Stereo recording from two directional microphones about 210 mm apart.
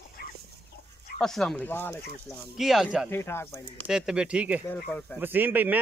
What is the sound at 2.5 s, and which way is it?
Speech, centre (ahead or behind).